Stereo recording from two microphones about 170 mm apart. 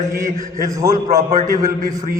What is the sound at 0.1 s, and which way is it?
Speech, 20° right (ahead or behind).